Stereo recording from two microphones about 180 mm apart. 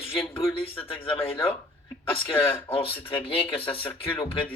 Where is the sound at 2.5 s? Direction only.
30° left (ahead or behind).